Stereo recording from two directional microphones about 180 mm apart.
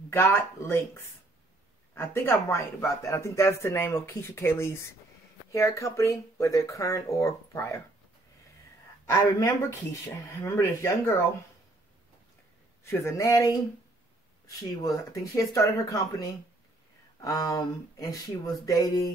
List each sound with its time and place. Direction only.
0.1 s speech: 15° left (ahead or behind)
9.0 s speech: 15° left (ahead or behind)
12.8 s speech: 15° left (ahead or behind)
14.8 s speech: 20° left (ahead or behind)